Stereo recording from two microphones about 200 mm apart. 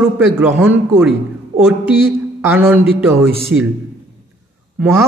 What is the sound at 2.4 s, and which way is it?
Speech, 10° right (ahead or behind).